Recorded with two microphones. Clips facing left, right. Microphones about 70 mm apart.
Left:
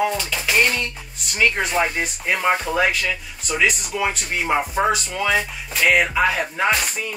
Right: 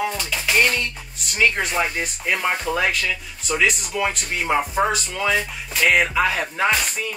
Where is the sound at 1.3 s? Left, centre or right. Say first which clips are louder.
Left 1 dB; centre.